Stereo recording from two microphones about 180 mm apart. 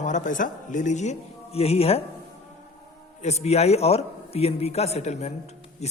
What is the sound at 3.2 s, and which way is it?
A man's voice, 35° left (ahead or behind).